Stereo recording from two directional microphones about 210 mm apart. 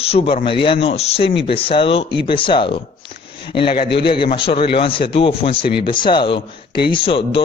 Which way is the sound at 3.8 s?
50° left (ahead or behind).